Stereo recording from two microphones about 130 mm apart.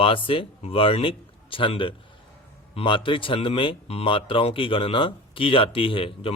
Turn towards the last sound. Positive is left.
turn(degrees=45)  # may be behind; listen again after turning